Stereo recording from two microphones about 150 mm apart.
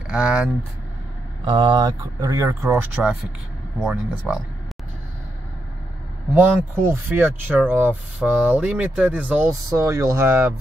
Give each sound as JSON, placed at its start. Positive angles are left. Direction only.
{"t": 0.1, "sound": "speech", "side_deg": -5}
{"t": 1.4, "sound": "speech", "side_deg": -35}
{"t": 6.3, "sound": "speech", "side_deg": -15}